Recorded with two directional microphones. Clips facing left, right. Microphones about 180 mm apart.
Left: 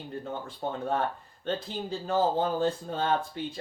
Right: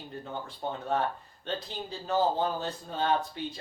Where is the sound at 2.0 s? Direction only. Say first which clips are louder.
Left 1 dB; 50° left (ahead or behind).